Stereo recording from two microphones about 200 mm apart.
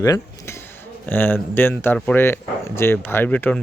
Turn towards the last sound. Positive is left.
turn(degrees=5)  # may be behind; listen again after turning